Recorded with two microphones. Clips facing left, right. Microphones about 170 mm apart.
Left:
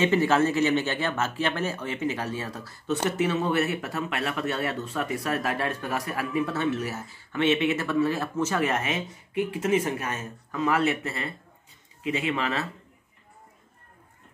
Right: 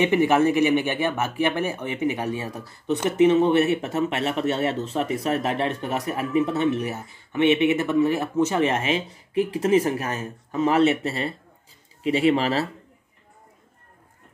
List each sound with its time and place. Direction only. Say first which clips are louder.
0.0 s a man's voice: right 3 dB; 15° right (ahead or behind); by 12.6 s 35° right (ahead or behind)